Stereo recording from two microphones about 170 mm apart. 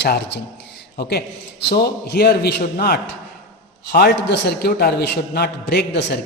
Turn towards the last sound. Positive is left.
turn(degrees=75)  # may be behind; listen again after turning